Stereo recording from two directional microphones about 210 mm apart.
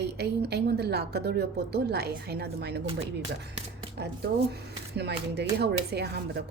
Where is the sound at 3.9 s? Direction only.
50° right (ahead or behind).